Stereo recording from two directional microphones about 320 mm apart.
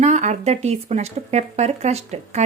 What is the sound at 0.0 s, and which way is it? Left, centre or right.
Speech, right.